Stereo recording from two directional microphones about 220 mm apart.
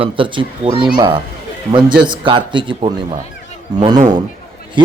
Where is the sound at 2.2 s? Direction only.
20° right (ahead or behind).